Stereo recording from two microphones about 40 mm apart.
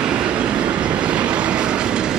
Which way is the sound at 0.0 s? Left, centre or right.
Right.